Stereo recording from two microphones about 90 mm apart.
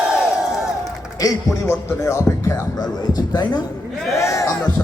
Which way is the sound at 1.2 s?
45° left (ahead or behind).